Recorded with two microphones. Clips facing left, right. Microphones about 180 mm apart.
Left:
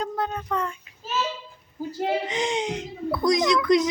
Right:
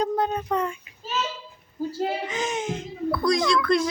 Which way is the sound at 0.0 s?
20° right (ahead or behind).